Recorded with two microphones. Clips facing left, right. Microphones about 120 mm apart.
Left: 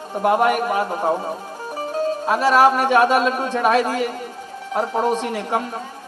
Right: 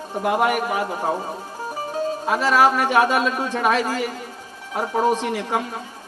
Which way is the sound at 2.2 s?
55° left (ahead or behind).